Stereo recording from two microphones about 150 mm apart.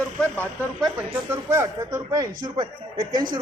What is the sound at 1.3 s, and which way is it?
Speech, 15° right (ahead or behind).